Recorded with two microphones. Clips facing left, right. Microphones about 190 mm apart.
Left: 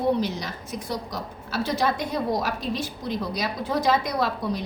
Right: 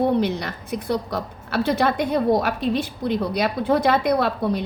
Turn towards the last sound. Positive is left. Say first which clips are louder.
# right 4 dB
turn(degrees=-60)  # may be behind; listen again after turning